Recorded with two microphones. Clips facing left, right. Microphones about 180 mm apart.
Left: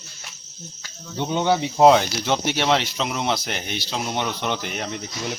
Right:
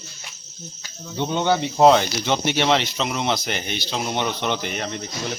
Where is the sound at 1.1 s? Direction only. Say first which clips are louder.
Even; 5° left (ahead or behind).